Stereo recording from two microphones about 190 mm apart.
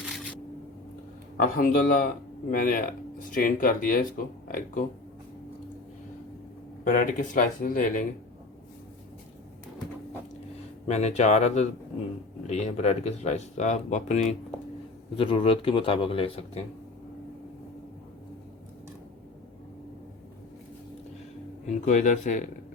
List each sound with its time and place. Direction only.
0.0 s a sound: 5° right (ahead or behind)
1.4 s speech: 45° left (ahead or behind)
6.8 s speech: 45° left (ahead or behind)
10.8 s a man's voice: 35° left (ahead or behind)
21.8 s speech: 40° left (ahead or behind)